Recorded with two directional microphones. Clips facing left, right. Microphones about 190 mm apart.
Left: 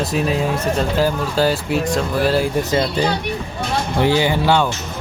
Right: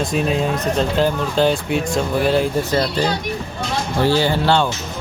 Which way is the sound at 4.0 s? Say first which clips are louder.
Even; 15° left (ahead or behind).